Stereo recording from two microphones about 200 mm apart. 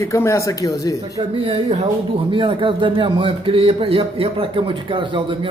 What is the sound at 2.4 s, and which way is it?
A man's voice, 25° right (ahead or behind).